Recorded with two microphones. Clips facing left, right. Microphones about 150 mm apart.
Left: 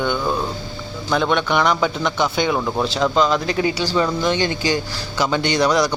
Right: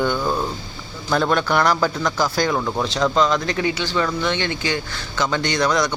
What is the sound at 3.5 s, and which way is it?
Speech, 30° left (ahead or behind).